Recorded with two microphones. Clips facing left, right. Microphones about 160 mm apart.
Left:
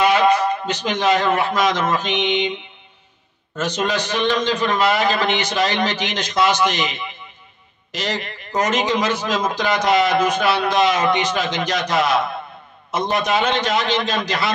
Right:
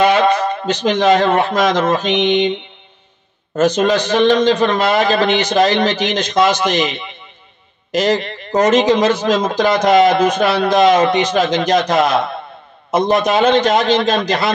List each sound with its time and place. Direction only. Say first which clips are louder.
0.0 s a sound: right 3 dB; 30° right (ahead or behind)
1.1 s a man's voice: right 5 dB; 30° right (ahead or behind)
6.9 s speech: right 3 dB; 30° right (ahead or behind)
7.9 s a man's voice: right 10 dB; 45° right (ahead or behind)
8.2 s a man's voice: right 7 dB; 30° right (ahead or behind); by 14.5 s 45° right (ahead or behind)